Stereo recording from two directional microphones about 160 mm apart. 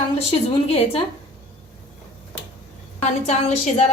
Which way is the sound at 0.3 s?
35° left (ahead or behind).